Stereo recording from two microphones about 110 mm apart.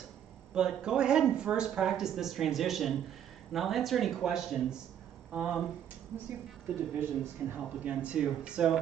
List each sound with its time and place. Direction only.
0.6 s speech: 5° right (ahead or behind)
7.0 s speech: 20° right (ahead or behind)
7.9 s speech: 10° right (ahead or behind)